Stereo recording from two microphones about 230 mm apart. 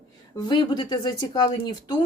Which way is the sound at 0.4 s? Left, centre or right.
Centre.